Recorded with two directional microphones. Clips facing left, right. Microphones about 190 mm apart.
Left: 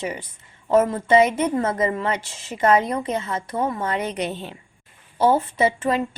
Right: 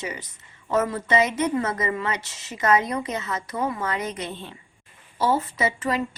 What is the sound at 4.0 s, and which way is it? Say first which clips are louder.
Speech: left 5 dB; 65° left (ahead or behind).